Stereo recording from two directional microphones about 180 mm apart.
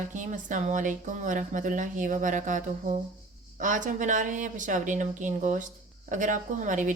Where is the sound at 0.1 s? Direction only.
45° right (ahead or behind).